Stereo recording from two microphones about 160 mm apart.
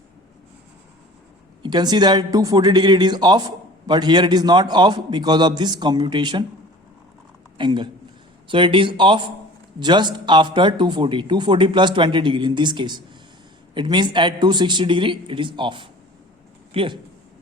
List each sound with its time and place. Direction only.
1.6 s speech: 25° right (ahead or behind)
7.6 s speech: 30° right (ahead or behind)